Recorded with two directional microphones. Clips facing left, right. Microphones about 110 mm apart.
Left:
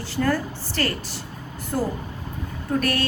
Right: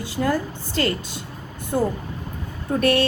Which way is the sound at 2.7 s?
25° right (ahead or behind).